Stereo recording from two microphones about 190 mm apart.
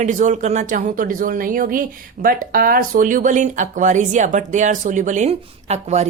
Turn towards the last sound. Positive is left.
turn(degrees=-35)  # may be behind; listen again after turning